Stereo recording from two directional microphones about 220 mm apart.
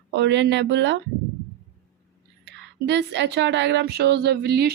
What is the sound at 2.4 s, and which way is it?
Speech, 50° right (ahead or behind).